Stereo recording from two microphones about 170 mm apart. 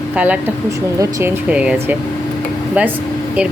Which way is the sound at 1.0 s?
20° right (ahead or behind).